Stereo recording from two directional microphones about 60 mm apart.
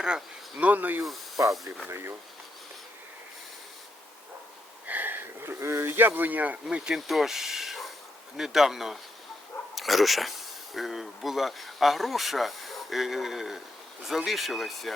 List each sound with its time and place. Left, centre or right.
0.6 s speech: right
4.9 s sniff: right
5.8 s speech: right
6.7 s speech: centre
6.9 s speech: centre